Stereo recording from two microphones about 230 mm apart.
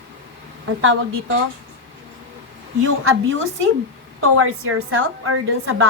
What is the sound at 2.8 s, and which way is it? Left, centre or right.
A woman's voice, right.